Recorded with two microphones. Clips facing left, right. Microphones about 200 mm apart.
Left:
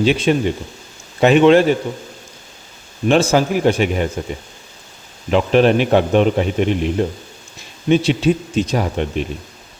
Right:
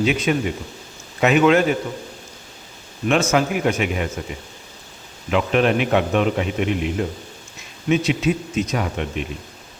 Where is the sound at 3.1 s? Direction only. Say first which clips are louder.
Left 4 dB; 30° left (ahead or behind).